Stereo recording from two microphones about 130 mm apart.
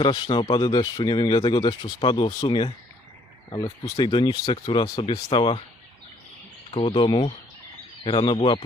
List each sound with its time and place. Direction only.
0.0 s speech: 40° left (ahead or behind)
3.9 s speech: 35° left (ahead or behind)
6.7 s speech: 45° left (ahead or behind)